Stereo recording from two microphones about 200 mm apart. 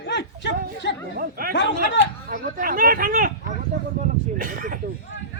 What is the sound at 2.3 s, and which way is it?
Speech, 45° right (ahead or behind).